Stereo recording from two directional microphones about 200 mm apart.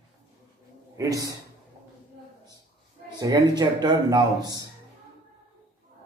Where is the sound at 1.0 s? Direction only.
15° right (ahead or behind).